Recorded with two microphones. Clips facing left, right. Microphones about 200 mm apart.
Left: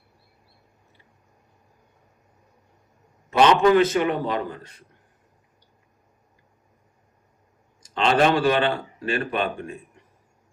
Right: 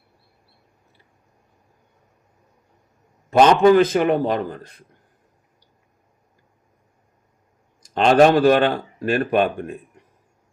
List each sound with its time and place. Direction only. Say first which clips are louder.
3.2 s a man's voice: right 4 dB; 45° right (ahead or behind)
7.9 s speech: right 6 dB; 45° right (ahead or behind)